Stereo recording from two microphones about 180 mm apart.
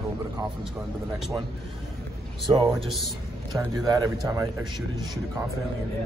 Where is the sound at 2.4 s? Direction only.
25° right (ahead or behind).